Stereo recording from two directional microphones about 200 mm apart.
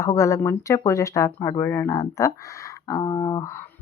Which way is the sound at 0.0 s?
15° left (ahead or behind).